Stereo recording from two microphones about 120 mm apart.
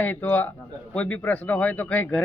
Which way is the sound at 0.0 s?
15° left (ahead or behind).